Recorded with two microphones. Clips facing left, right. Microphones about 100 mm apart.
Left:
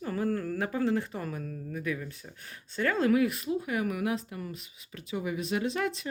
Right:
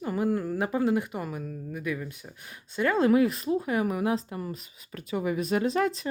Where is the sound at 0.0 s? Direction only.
15° right (ahead or behind).